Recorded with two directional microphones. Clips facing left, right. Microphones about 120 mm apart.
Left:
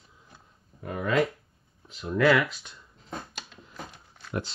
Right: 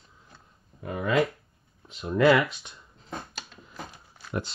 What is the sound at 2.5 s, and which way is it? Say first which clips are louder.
Speech: right 1 dB; 25° right (ahead or behind).